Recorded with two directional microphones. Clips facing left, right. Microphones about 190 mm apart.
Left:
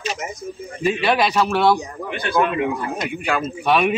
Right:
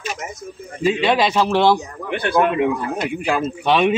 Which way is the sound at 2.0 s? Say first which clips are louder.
Right 5 dB; 60° right (ahead or behind).